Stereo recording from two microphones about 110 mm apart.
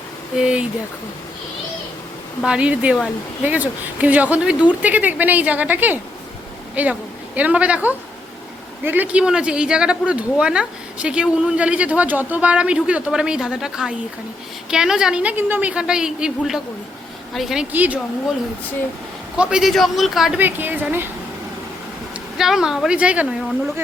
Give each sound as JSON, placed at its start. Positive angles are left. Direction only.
{"t": 0.3, "sound": "speech", "side_deg": -10}
{"t": 2.4, "sound": "a man's voice", "side_deg": -10}
{"t": 17.7, "sound": "speech", "side_deg": -15}
{"t": 19.4, "sound": "a man's voice", "side_deg": -5}
{"t": 20.4, "sound": "speech", "side_deg": -15}
{"t": 22.4, "sound": "a man's voice", "side_deg": -5}